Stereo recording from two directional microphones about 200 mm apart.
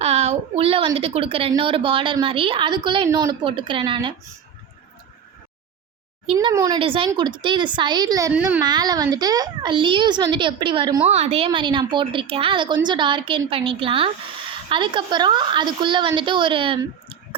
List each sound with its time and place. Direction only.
0.0 s a woman's voice: 30° right (ahead or behind)
6.4 s a woman's voice: 15° right (ahead or behind)
8.3 s speech: 10° right (ahead or behind)
8.6 s a woman's voice: 20° right (ahead or behind)